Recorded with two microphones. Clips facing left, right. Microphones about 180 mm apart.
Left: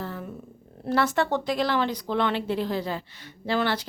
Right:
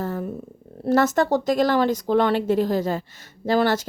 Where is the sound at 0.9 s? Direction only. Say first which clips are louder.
Right 5 dB; 45° right (ahead or behind).